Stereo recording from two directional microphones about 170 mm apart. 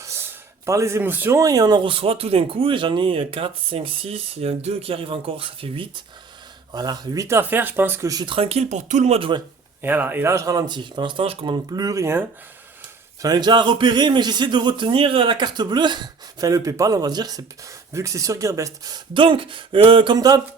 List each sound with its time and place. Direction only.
0.0 s speech: 15° right (ahead or behind); by 9.4 s 35° right (ahead or behind)
9.8 s speech: 10° right (ahead or behind)
13.2 s speech: 25° right (ahead or behind)